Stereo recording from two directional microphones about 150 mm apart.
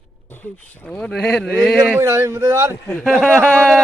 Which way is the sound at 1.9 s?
20° right (ahead or behind).